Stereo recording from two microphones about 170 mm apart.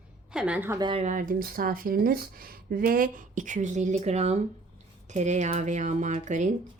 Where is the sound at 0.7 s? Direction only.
25° right (ahead or behind).